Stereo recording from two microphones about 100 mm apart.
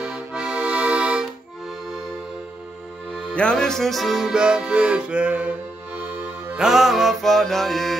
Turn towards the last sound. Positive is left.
turn(degrees=5)  # may be behind; listen again after turning